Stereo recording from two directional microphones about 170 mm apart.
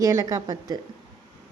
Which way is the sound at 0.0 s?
20° right (ahead or behind).